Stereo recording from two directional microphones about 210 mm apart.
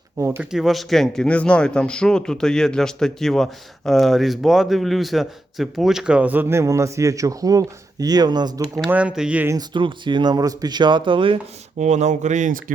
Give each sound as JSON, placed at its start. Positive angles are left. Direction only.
{"t": 0.2, "sound": "speech", "side_deg": -10}
{"t": 8.7, "sound": "speech", "side_deg": -5}
{"t": 9.6, "sound": "speech", "side_deg": -20}
{"t": 11.8, "sound": "speech", "side_deg": -35}